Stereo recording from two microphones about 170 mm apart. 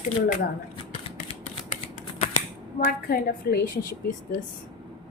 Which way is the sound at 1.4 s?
45° left (ahead or behind).